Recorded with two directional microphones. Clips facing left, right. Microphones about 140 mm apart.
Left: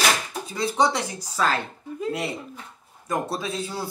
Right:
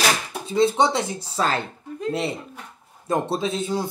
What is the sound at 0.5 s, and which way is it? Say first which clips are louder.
Speech: right 4 dB; 25° right (ahead or behind).